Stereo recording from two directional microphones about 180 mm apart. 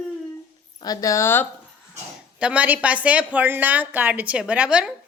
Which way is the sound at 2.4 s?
5° right (ahead or behind).